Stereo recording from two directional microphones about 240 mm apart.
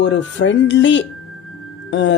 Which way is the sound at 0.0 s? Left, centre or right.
Left.